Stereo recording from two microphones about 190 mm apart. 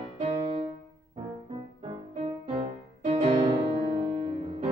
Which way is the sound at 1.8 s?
30° right (ahead or behind).